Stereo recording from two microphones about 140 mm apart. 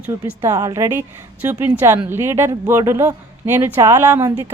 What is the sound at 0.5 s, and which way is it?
Speech, 25° right (ahead or behind).